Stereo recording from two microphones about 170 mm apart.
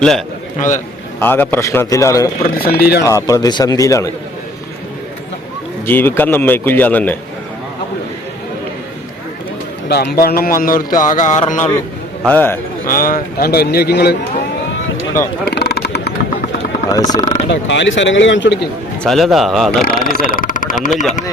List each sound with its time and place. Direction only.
0.0 s a man's voice: centre (ahead or behind)
2.6 s speech: 65° left (ahead or behind)
3.0 s a man's voice: 20° left (ahead or behind)
5.8 s a man's voice: 10° left (ahead or behind)
9.9 s a man's voice: 65° left (ahead or behind); by 11.7 s 45° left (ahead or behind)
12.2 s a man's voice: 10° left (ahead or behind)
12.8 s a man's voice: 55° left (ahead or behind)
15.4 s a sound: 70° left (ahead or behind)
16.9 s a man's voice: 25° left (ahead or behind)
17.5 s speech: 90° left
19.0 s a man's voice: centre (ahead or behind)
19.8 s a man's voice: 60° left (ahead or behind)